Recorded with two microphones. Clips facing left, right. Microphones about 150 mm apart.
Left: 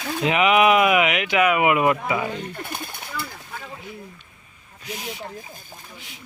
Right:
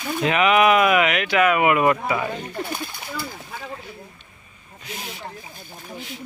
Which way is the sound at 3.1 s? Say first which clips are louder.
Right 1 dB; 25° right (ahead or behind).